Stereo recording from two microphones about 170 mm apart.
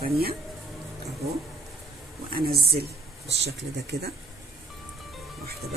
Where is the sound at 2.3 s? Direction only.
60° right (ahead or behind).